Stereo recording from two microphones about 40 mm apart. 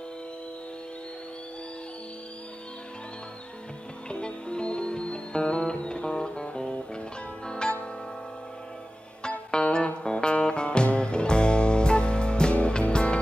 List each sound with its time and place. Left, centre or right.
4.1 s music: left
9.5 s music: left